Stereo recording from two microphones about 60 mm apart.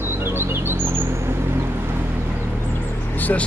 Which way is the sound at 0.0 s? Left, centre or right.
Right.